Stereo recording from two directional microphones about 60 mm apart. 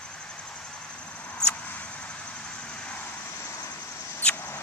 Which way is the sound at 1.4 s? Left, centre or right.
Left.